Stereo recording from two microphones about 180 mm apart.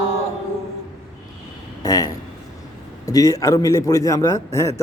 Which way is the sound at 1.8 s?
20° left (ahead or behind).